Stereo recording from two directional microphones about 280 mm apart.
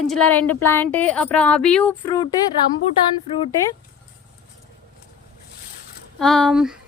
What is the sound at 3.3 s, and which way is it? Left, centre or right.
Speech, centre.